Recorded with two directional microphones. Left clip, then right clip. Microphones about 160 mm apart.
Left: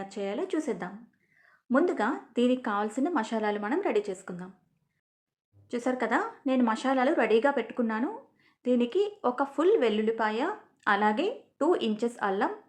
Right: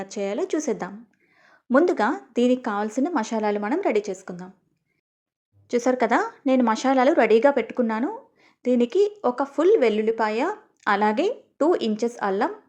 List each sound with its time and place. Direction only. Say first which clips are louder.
0.0 s speech: right 6 dB; 35° right (ahead or behind)
5.6 s speech: right 9 dB; 40° right (ahead or behind)